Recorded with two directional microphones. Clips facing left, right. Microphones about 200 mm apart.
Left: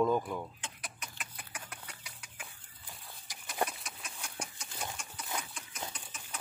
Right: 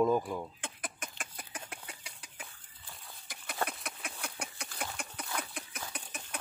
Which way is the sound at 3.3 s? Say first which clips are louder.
Left 2 dB; 55° right (ahead or behind).